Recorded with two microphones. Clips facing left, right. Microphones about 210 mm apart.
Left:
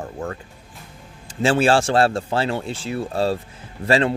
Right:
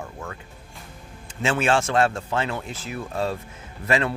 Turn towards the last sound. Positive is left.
turn(degrees=30)  # may be behind; listen again after turning